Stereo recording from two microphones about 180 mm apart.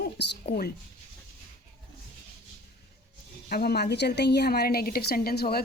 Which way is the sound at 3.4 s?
60° left (ahead or behind).